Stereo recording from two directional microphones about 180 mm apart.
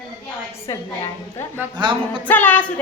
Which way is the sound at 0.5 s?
15° left (ahead or behind).